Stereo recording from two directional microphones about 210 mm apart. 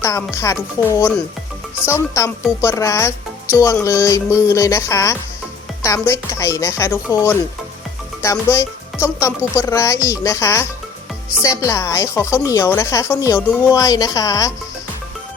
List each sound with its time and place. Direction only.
0.0 s speech: 15° left (ahead or behind)